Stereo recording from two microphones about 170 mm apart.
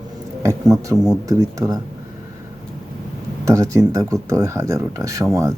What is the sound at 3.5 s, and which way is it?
Speech, 20° right (ahead or behind).